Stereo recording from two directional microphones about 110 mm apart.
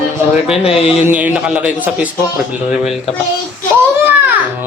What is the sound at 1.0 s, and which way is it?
A man's voice, 15° right (ahead or behind).